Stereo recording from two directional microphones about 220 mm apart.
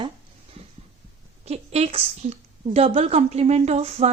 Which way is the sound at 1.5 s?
30° right (ahead or behind).